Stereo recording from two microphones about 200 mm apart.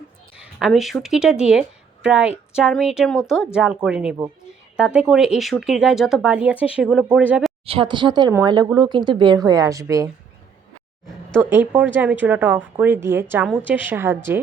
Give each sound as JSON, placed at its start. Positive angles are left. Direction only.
{"t": 0.3, "sound": "a woman's voice", "side_deg": -5}
{"t": 7.6, "sound": "a woman's voice", "side_deg": -30}
{"t": 11.3, "sound": "a woman's voice", "side_deg": -10}